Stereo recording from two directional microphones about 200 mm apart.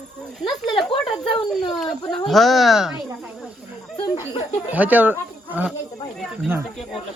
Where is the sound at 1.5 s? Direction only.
Centre (ahead or behind).